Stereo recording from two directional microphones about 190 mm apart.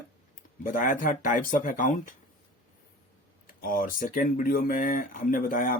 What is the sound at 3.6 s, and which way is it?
Speech, 45° left (ahead or behind).